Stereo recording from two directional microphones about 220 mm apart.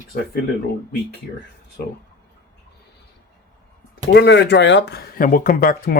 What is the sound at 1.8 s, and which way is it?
Speech, 45° left (ahead or behind).